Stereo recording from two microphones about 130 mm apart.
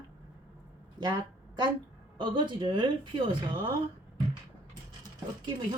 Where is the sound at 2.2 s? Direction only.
40° right (ahead or behind).